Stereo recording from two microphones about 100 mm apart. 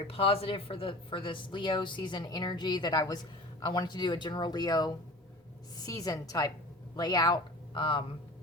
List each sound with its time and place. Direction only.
0.0 s a woman's voice: 75° left (ahead or behind); by 8.0 s 55° left (ahead or behind)